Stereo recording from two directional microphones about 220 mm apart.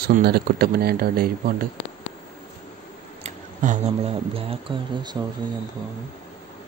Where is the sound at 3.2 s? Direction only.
30° right (ahead or behind).